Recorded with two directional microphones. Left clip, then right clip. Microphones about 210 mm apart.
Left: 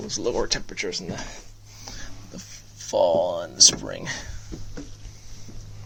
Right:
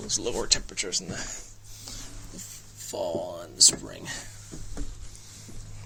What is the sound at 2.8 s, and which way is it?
Speech, 45° left (ahead or behind).